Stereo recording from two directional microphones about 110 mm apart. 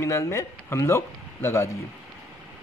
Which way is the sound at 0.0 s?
25° left (ahead or behind).